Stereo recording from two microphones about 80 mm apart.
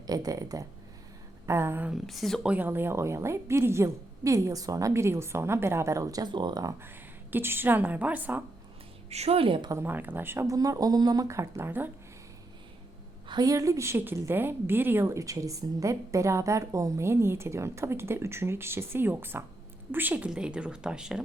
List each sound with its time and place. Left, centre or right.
0.1 s speech: right
1.5 s a woman's voice: right
2.0 s speech: centre
2.4 s a woman's voice: centre; by 6.3 s right
6.3 s speech: right
6.8 s a woman's voice: right
9.7 s speech: right
10.4 s speech: right
11.3 s a woman's voice: right
13.4 s a woman's voice: right; by 21.2 s centre